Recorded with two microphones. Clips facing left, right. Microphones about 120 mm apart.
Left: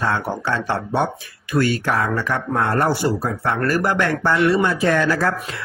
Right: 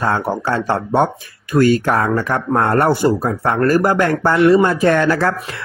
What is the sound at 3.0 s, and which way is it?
Speech, 45° right (ahead or behind).